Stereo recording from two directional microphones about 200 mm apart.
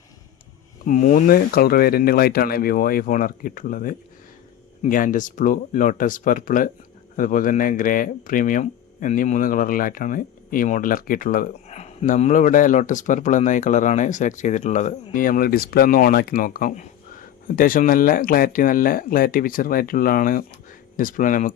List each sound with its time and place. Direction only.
0.9 s speech: 40° left (ahead or behind)